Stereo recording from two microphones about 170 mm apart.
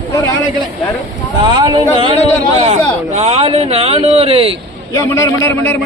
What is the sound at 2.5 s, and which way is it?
Speech, 40° right (ahead or behind).